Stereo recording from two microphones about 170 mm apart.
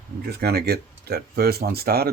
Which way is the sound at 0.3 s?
70° right (ahead or behind).